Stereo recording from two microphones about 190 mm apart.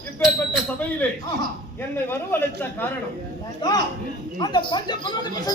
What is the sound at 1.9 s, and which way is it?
Speech, 10° left (ahead or behind).